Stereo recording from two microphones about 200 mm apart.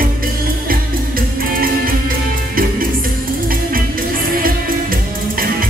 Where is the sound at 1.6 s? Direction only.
45° right (ahead or behind).